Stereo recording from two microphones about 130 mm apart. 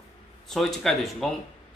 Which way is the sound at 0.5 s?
Centre (ahead or behind).